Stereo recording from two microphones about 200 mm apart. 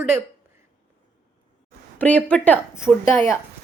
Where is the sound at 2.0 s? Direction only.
5° left (ahead or behind).